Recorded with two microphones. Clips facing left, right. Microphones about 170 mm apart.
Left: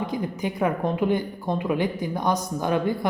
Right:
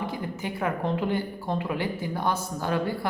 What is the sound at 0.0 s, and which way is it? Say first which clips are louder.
A woman's voice: left 4 dB; 20° left (ahead or behind).